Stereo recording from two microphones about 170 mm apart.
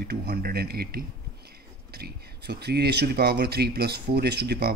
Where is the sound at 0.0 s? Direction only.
70° right (ahead or behind).